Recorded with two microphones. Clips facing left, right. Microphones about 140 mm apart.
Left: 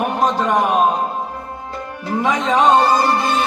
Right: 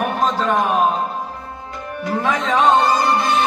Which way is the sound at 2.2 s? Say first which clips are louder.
Left 2 dB; 15° left (ahead or behind).